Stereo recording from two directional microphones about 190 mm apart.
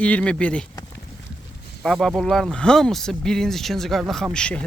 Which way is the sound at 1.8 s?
Centre (ahead or behind).